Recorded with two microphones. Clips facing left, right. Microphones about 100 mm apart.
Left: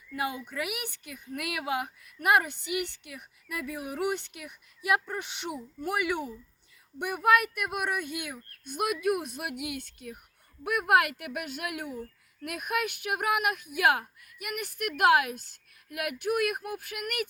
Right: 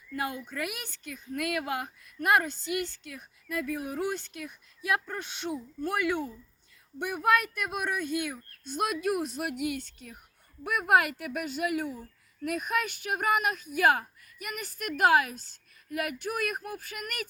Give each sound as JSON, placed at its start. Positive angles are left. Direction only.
{"t": 0.1, "sound": "a woman's voice", "side_deg": 5}